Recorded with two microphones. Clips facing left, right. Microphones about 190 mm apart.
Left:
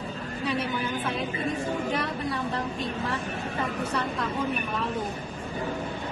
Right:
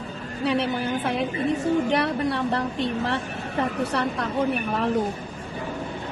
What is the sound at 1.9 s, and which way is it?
A woman's voice, 70° right (ahead or behind).